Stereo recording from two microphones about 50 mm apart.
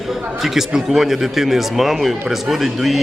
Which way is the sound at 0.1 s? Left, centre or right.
Centre.